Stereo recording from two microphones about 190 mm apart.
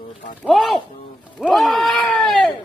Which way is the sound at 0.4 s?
Centre (ahead or behind).